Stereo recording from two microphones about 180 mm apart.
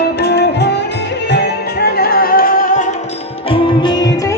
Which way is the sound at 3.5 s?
25° left (ahead or behind).